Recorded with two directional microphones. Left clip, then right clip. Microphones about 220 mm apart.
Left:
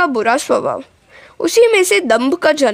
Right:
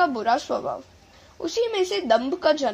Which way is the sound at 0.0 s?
40° left (ahead or behind).